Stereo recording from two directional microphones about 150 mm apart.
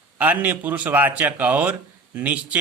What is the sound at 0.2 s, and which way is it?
Speech, 10° right (ahead or behind).